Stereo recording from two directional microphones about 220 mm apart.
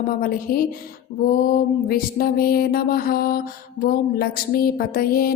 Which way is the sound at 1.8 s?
45° left (ahead or behind).